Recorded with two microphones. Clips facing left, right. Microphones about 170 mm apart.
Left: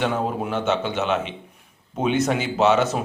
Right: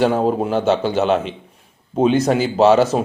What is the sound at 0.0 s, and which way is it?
A man's voice, 30° right (ahead or behind).